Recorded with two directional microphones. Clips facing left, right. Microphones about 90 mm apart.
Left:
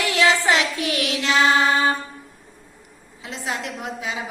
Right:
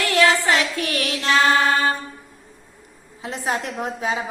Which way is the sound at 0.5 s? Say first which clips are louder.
Even; 40° right (ahead or behind).